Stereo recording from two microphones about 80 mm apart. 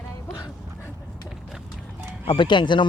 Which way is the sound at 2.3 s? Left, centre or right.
Left.